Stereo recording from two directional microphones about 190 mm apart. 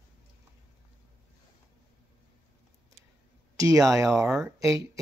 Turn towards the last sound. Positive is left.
turn(degrees=-15)  # may be behind; listen again after turning